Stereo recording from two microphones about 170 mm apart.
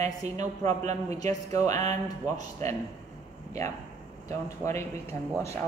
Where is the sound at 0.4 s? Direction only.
40° right (ahead or behind).